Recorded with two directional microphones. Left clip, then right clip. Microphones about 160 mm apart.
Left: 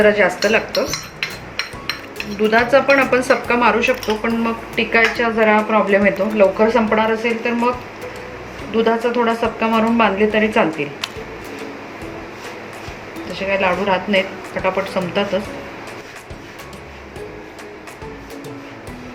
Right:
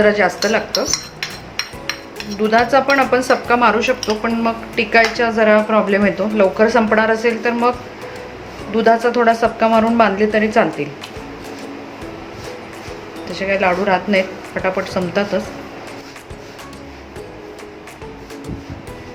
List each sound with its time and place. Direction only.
0.0 s speech: 30° right (ahead or behind)
2.4 s speech: 30° right (ahead or behind)
8.7 s speech: 45° right (ahead or behind)
10.2 s speech: 20° right (ahead or behind)
13.3 s speech: 40° right (ahead or behind)